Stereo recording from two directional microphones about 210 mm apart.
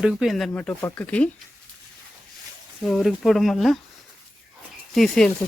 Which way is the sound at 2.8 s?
Centre (ahead or behind).